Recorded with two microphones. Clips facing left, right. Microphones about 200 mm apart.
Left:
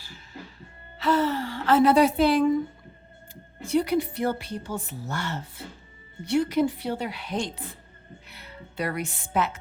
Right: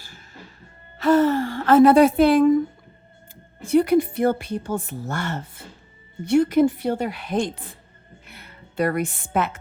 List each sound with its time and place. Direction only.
0.9 s a woman's voice: 50° right (ahead or behind)
3.7 s a woman's voice: 50° right (ahead or behind)